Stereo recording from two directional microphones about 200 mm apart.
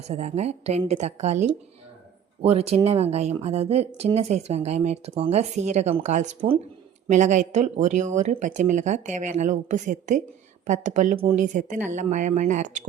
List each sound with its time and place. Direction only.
0.0 s speech: 35° right (ahead or behind)